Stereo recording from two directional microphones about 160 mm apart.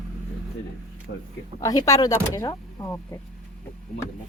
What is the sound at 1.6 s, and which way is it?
Speech, 20° left (ahead or behind).